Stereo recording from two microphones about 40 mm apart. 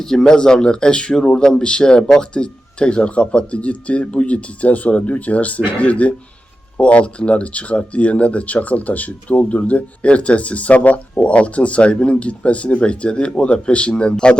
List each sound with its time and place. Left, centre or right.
0.0 s speech: centre